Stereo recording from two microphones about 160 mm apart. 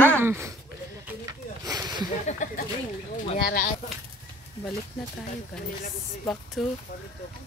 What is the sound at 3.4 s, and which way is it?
Speech, 70° left (ahead or behind).